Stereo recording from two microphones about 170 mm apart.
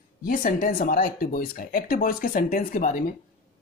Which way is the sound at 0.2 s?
55° left (ahead or behind).